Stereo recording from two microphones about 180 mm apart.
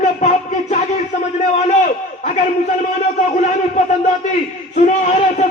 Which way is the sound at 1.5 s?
40° left (ahead or behind).